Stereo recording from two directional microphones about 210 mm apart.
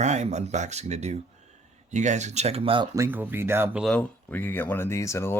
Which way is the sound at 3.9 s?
5° left (ahead or behind).